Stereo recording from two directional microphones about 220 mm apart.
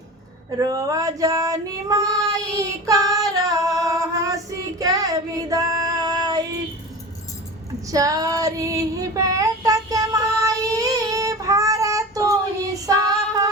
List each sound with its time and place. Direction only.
0.6 s child singing: 15° right (ahead or behind)
7.9 s child singing: 15° right (ahead or behind)
12.8 s female singing: 15° right (ahead or behind)